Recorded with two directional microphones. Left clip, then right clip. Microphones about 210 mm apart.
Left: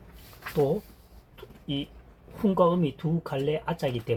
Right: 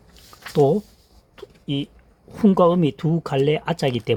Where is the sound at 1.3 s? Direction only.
60° right (ahead or behind).